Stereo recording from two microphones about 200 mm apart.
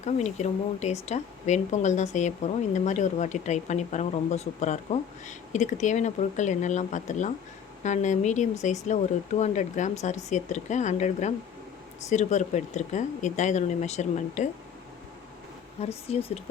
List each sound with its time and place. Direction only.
0.0 s speech: 35° left (ahead or behind)
15.8 s speech: 30° left (ahead or behind)